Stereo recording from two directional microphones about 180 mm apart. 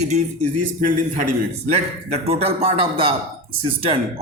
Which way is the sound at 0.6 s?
50° right (ahead or behind).